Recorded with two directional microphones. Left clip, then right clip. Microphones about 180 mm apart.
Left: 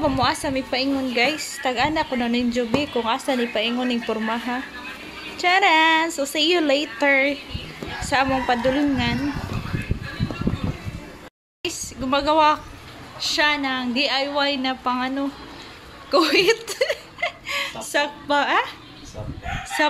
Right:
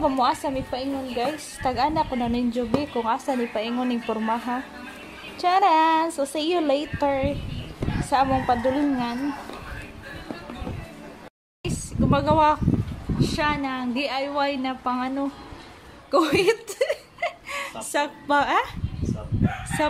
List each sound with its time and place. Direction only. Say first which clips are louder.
0.0 s a woman's voice: left 1 dB; 10° right (ahead or behind)
0.7 s a woman's voice: left 6 dB; 5° left (ahead or behind)
1.3 s a woman's voice: left 2 dB; 10° right (ahead or behind)
11.6 s a sound: even; 10° right (ahead or behind)
13.2 s a woman's voice: left 4 dB; 10° right (ahead or behind)
16.1 s a sound: left 3 dB; 15° right (ahead or behind)
17.7 s a woman's voice: right 1 dB; 20° right (ahead or behind)